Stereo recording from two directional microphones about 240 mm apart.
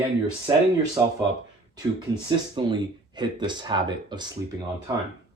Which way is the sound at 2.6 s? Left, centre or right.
Right.